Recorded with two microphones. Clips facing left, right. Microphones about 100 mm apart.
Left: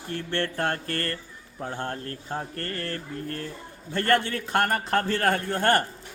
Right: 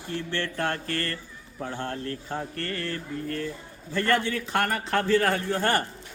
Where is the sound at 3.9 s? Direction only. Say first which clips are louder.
Left 1 dB; 55° left (ahead or behind).